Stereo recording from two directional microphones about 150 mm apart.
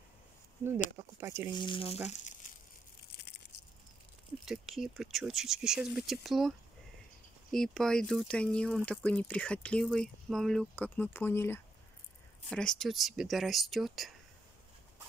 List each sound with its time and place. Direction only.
0.6 s speech: 15° right (ahead or behind)
1.5 s speech: 30° left (ahead or behind)
2.0 s crumpling: 55° left (ahead or behind)
3.1 s a sound: 90° left
4.5 s speech: centre (ahead or behind)
7.5 s speech: 5° left (ahead or behind)
12.4 s speech: 5° left (ahead or behind)